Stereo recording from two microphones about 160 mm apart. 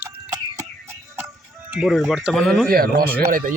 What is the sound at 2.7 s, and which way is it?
Speech, 70° right (ahead or behind).